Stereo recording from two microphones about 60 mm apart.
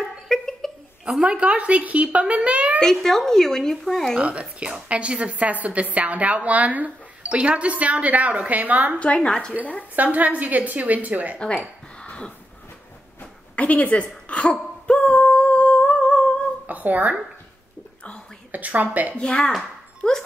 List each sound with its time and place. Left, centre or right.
0.3 s a sound: centre
1.2 s a woman's voice: right
2.8 s speech: centre
4.2 s a woman's voice: centre
9.0 s a woman's voice: centre
9.9 s a woman's voice: right
12.0 s a sound: centre
16.6 s speech: right
18.5 s a woman's voice: right
19.1 s speech: centre